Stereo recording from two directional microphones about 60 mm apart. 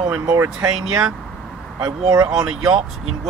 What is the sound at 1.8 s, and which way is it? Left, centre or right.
Speech, right.